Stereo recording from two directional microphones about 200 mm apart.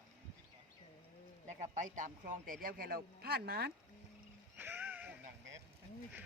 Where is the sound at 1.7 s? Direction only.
40° right (ahead or behind).